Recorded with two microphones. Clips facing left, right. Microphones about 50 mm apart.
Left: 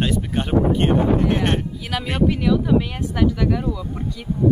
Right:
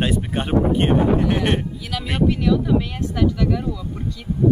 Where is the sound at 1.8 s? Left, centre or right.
Centre.